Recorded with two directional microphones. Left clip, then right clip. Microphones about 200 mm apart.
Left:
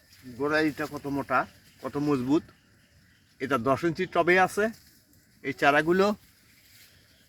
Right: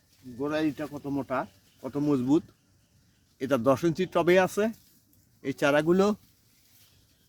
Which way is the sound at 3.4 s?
60° right (ahead or behind).